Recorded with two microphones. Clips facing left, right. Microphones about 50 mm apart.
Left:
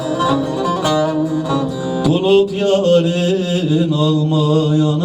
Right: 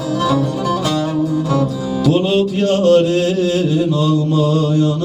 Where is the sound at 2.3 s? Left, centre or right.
Right.